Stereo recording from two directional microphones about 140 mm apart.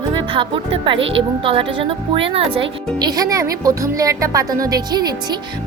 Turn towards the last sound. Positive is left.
turn(degrees=-30)  # may be behind; listen again after turning